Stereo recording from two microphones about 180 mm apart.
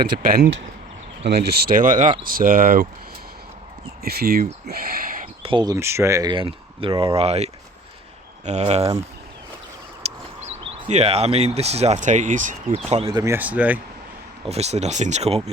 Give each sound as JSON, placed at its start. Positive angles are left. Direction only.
{"t": 0.0, "sound": "speech", "side_deg": -55}
{"t": 4.0, "sound": "speech", "side_deg": -55}
{"t": 4.6, "sound": "a sound", "side_deg": -55}
{"t": 5.4, "sound": "speech", "side_deg": -25}
{"t": 10.0, "sound": "a sound", "side_deg": -35}
{"t": 10.8, "sound": "speech", "side_deg": -35}
{"t": 12.9, "sound": "speech", "side_deg": -30}
{"t": 14.5, "sound": "speech", "side_deg": -35}